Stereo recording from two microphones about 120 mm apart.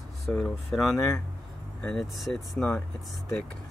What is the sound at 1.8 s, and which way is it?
Speech, 5° left (ahead or behind).